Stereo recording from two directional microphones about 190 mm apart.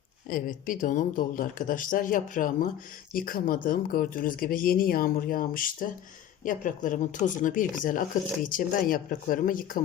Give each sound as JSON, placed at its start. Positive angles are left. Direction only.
{"t": 0.3, "sound": "speech", "side_deg": 45}